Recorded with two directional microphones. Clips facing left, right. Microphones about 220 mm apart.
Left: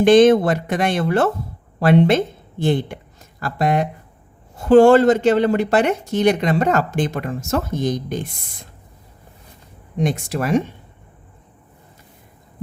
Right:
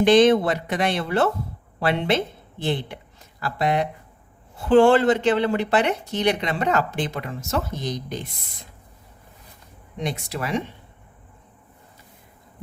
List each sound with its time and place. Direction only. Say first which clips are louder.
0.0 s speech: left 4 dB; 50° left (ahead or behind)
10.0 s speech: left 7 dB; 45° left (ahead or behind)